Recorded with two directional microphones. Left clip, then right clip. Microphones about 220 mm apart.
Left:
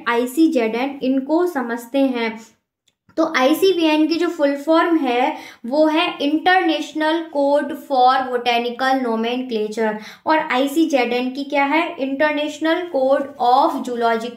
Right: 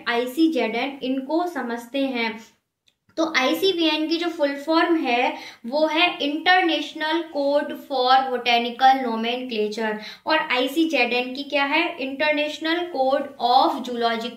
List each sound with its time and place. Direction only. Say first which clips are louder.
0.0 s a woman's voice: left 4 dB; 55° left (ahead or behind)